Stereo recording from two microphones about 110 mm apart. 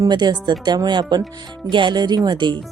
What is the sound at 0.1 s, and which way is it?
Speech, 40° right (ahead or behind).